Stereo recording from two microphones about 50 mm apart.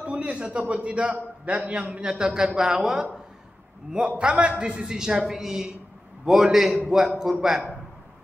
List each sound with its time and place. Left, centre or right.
0.0 s a man's voice: right
4.2 s a woman's voice: right